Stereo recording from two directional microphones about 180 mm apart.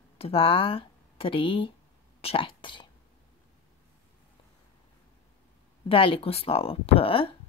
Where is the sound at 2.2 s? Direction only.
30° left (ahead or behind).